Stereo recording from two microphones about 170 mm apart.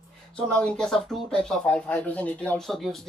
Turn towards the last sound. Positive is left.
turn(degrees=0)  # may be behind; listen again after turning